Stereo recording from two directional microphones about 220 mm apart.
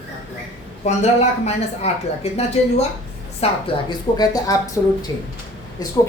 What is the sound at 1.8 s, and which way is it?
A woman's voice, 30° left (ahead or behind).